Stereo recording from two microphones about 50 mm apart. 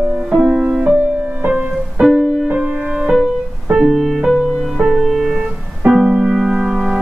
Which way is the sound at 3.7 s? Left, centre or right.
Centre.